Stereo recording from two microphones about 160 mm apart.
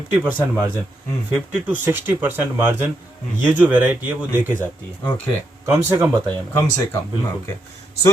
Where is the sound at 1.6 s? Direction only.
10° right (ahead or behind).